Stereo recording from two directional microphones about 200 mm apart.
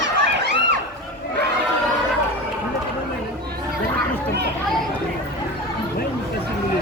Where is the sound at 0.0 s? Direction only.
60° right (ahead or behind).